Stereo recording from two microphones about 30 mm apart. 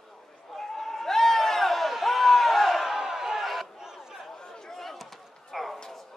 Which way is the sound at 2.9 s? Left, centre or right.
Centre.